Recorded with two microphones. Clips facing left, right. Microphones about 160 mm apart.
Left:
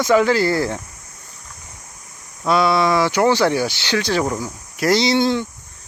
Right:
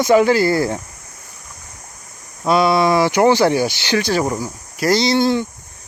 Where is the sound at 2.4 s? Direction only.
15° right (ahead or behind).